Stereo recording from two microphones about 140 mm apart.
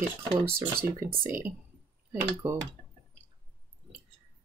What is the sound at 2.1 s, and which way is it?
Speech, 15° right (ahead or behind).